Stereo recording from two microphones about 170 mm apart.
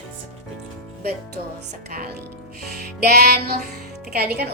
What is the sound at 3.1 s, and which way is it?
Music, 65° right (ahead or behind).